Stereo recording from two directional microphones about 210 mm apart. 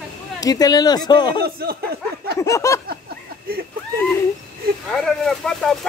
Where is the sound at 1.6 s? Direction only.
50° right (ahead or behind).